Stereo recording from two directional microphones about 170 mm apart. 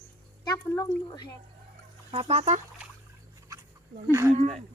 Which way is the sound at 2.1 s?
35° right (ahead or behind).